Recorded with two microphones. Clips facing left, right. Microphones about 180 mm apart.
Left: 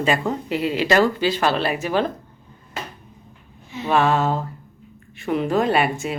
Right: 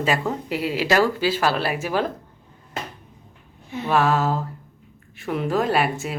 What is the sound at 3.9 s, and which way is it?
Speech, centre (ahead or behind).